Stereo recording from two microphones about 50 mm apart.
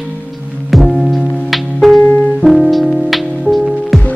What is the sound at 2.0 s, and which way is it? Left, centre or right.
Music, left.